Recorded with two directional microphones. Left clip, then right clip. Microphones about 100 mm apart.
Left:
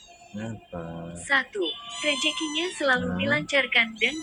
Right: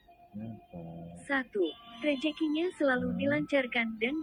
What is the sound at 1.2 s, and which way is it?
A woman's voice, 25° right (ahead or behind).